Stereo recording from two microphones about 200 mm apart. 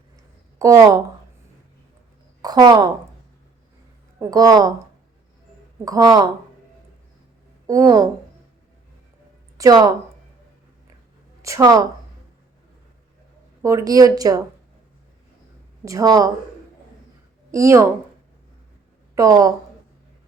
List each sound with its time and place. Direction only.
0.6 s speech: 15° right (ahead or behind)
2.4 s a woman's voice: 20° right (ahead or behind)
4.2 s a woman's voice: 20° right (ahead or behind)
5.8 s a woman's voice: 20° right (ahead or behind)
7.7 s speech: 15° right (ahead or behind)
9.6 s a woman's voice: 20° right (ahead or behind)
11.4 s speech: 15° right (ahead or behind)
13.6 s speech: 15° right (ahead or behind)
15.8 s speech: 15° right (ahead or behind)
17.5 s speech: 15° right (ahead or behind)
19.1 s a woman's voice: 15° right (ahead or behind)